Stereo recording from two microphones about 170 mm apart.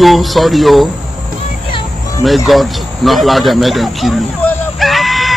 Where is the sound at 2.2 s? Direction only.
Centre (ahead or behind).